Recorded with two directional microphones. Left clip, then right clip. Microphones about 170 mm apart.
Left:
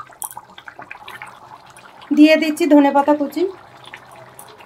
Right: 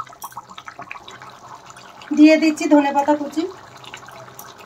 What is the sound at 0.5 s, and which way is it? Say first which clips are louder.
Water: right 1 dB; 10° right (ahead or behind).